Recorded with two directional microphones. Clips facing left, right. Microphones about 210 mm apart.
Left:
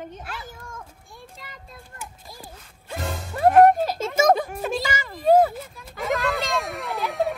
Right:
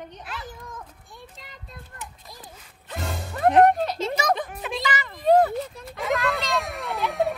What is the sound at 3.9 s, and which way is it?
Speech, 45° left (ahead or behind).